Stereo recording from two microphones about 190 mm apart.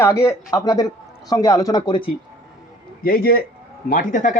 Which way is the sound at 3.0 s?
50° left (ahead or behind).